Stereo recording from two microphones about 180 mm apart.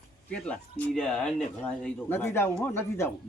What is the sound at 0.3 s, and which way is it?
Speech, 5° left (ahead or behind).